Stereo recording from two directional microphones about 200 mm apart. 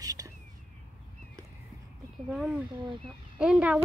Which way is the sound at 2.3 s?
Centre (ahead or behind).